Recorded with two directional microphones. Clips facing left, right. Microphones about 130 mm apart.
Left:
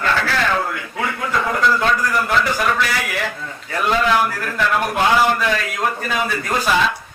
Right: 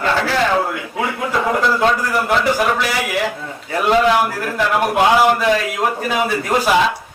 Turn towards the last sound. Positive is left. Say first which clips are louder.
# right 3 dB
turn(degrees=-20)  # may be behind; listen again after turning